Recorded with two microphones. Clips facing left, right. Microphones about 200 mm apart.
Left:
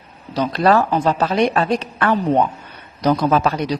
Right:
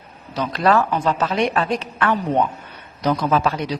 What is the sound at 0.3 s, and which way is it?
A woman's voice, 35° left (ahead or behind).